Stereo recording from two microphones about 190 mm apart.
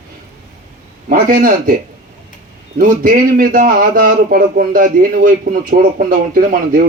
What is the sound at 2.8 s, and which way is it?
A man's voice, 45° right (ahead or behind).